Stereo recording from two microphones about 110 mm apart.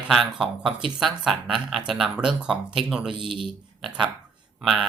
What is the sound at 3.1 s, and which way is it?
Speech, 50° right (ahead or behind).